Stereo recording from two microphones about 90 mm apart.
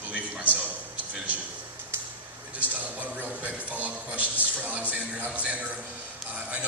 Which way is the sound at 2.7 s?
20° right (ahead or behind).